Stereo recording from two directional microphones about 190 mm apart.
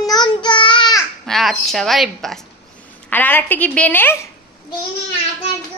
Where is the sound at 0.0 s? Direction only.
20° left (ahead or behind).